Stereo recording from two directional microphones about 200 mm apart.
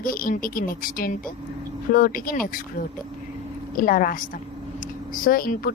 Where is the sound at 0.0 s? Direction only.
45° left (ahead or behind).